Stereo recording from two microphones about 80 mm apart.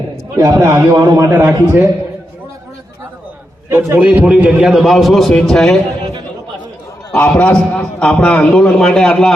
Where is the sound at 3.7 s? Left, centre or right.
Right.